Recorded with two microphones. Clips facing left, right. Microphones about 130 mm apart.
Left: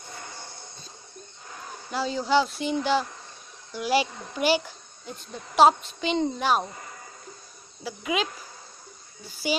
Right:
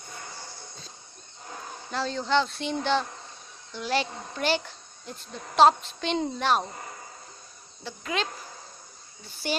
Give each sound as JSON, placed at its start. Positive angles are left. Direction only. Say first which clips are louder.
{"t": 1.9, "sound": "speech", "louder": "left 2 dB", "side_deg": 5}
{"t": 7.8, "sound": "speech", "louder": "left 3 dB", "side_deg": 10}
{"t": 9.3, "sound": "speech", "louder": "left 3 dB", "side_deg": 5}